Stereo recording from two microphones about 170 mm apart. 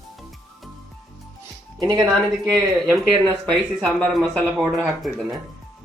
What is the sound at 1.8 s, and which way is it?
Speech, 25° right (ahead or behind).